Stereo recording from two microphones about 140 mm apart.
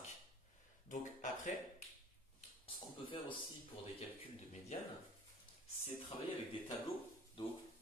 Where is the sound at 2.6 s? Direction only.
35° left (ahead or behind).